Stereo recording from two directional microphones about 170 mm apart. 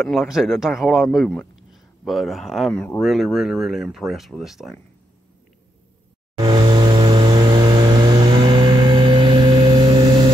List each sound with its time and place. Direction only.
0.0 s speech: centre (ahead or behind)
6.3 s vehicle: 25° right (ahead or behind)